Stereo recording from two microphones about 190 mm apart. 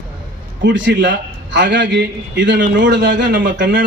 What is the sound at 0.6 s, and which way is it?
A man's voice, 70° right (ahead or behind).